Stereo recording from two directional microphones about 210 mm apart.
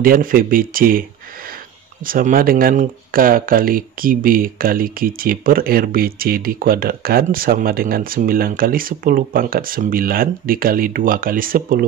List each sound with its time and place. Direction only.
0.0 s speech: 40° right (ahead or behind)
2.0 s speech: 40° right (ahead or behind)